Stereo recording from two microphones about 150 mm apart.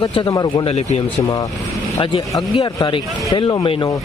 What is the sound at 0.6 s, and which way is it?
Speech, 45° left (ahead or behind).